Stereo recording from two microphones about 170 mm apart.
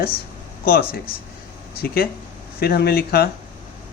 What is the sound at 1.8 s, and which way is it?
Speech, 65° left (ahead or behind).